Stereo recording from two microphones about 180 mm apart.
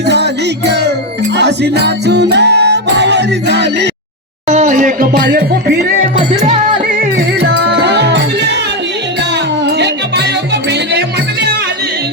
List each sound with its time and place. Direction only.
0.1 s music: 70° right (ahead or behind)
4.4 s a sound: 40° right (ahead or behind); by 5.8 s 60° right (ahead or behind)
7.0 s music: 65° right (ahead or behind)
9.6 s music: 70° right (ahead or behind)